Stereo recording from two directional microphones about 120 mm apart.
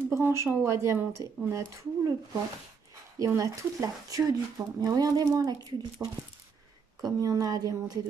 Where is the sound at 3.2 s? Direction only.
25° right (ahead or behind).